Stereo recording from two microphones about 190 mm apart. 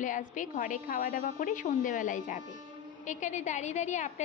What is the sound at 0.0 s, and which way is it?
A woman's voice, 40° left (ahead or behind).